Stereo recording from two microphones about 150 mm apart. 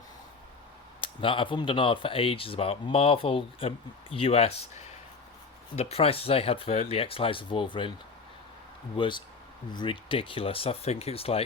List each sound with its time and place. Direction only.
1.0 s speech: 35° left (ahead or behind)
5.7 s speech: 45° left (ahead or behind)
9.0 s speech: 30° left (ahead or behind)